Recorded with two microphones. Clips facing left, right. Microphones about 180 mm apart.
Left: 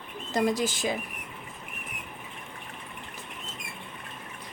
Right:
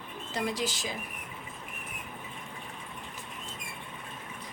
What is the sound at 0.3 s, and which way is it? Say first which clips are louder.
Speech: left 6 dB; 45° left (ahead or behind).